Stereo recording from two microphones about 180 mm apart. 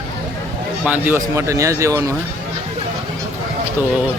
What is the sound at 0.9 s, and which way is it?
Speech, 10° right (ahead or behind).